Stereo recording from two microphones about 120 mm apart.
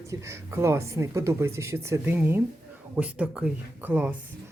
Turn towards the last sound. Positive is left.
turn(degrees=-10)  # may be behind; listen again after turning